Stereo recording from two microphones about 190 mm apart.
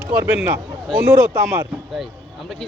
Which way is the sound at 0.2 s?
10° right (ahead or behind).